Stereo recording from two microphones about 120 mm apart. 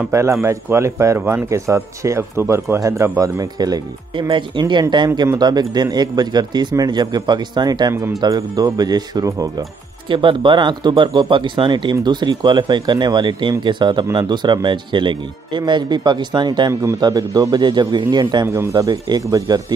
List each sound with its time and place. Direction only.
0.1 s speech: 25° right (ahead or behind)
10.0 s speech: 45° right (ahead or behind)
18.5 s speech: 25° right (ahead or behind)